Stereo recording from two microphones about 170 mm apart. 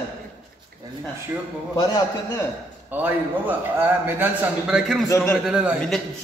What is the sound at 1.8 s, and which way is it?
Speech, 25° left (ahead or behind).